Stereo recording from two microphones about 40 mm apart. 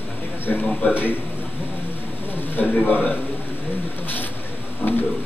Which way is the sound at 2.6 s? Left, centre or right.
Left.